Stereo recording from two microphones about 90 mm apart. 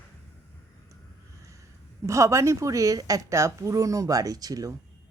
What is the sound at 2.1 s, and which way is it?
A woman's voice, 35° right (ahead or behind).